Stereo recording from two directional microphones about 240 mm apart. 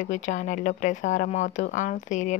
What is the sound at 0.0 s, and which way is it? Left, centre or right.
Speech, left.